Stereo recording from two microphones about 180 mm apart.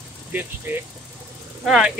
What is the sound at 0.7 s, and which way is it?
Speech, 10° right (ahead or behind).